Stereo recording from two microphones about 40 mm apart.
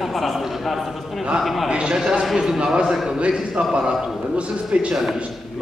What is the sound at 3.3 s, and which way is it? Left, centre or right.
Speech, centre.